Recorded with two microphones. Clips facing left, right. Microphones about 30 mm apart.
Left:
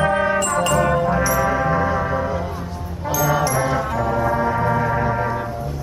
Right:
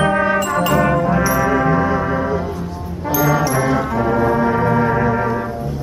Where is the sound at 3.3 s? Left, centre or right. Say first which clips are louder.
Right 3 dB; centre.